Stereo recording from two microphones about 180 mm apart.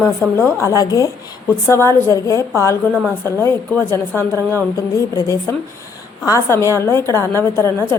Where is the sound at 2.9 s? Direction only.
5° right (ahead or behind).